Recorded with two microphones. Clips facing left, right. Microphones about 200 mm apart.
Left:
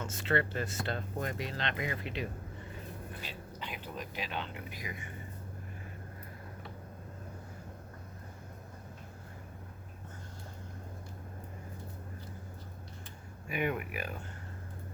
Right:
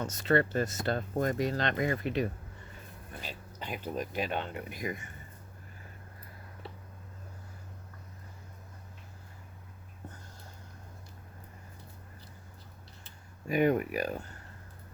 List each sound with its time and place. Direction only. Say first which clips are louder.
0.0 s speech: right 5 dB; 40° right (ahead or behind)
3.6 s speech: right 7 dB; 45° right (ahead or behind)
13.5 s speech: right 8 dB; 40° right (ahead or behind)